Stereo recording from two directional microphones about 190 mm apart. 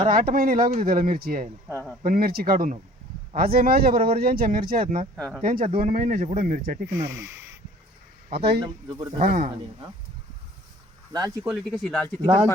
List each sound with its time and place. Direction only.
0.0 s speech: 50° right (ahead or behind)
5.1 s speech: centre (ahead or behind)
5.4 s speech: 50° right (ahead or behind)
6.9 s speech: 15° right (ahead or behind)
8.3 s speech: 60° right (ahead or behind)
8.6 s speech: 20° right (ahead or behind)
9.1 s speech: 45° right (ahead or behind)
11.1 s speech: 20° right (ahead or behind)
11.4 s speech: centre (ahead or behind)